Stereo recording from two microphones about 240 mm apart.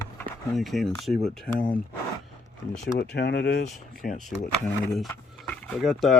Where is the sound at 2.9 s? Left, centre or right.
Left.